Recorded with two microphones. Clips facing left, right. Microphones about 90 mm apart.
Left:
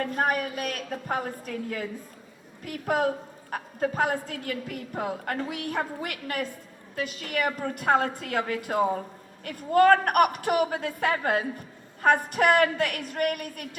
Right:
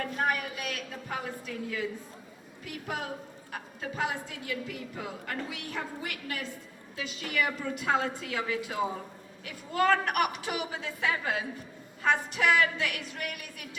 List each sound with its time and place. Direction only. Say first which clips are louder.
0.0 s a woman's voice: left 4 dB; 45° left (ahead or behind)